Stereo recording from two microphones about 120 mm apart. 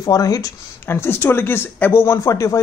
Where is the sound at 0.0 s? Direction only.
30° left (ahead or behind).